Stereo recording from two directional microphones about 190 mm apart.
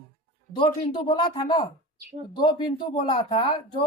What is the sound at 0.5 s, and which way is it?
Speech, 25° left (ahead or behind).